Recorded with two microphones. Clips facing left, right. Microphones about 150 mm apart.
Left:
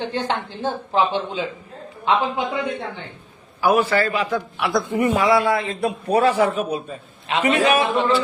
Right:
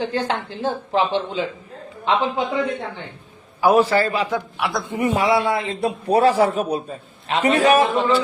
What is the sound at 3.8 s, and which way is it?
A man's voice, 35° right (ahead or behind).